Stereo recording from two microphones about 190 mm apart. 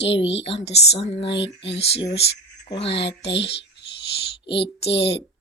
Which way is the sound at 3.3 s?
65° left (ahead or behind).